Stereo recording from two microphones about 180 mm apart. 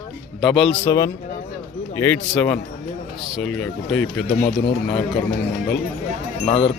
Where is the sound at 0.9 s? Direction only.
20° left (ahead or behind).